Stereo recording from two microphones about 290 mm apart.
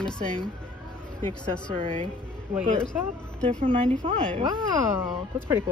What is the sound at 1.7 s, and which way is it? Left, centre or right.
Speech, centre.